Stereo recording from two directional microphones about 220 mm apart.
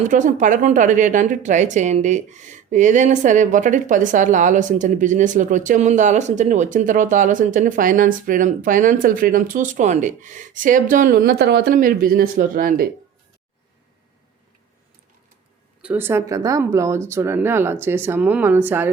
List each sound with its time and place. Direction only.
0.1 s a woman's voice: 35° right (ahead or behind)
15.8 s speech: 10° right (ahead or behind)